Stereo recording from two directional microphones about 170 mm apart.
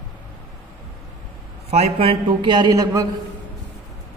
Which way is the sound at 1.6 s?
35° right (ahead or behind).